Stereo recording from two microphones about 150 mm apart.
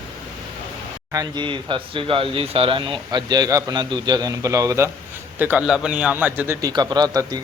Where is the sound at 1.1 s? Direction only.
30° right (ahead or behind).